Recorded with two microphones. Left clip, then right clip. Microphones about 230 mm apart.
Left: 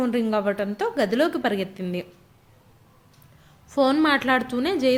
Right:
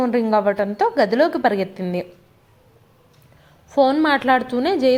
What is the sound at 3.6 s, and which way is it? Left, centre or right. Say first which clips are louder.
A woman's voice: right 4 dB; centre.